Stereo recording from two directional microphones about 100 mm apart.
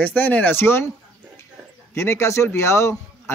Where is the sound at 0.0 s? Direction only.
15° left (ahead or behind).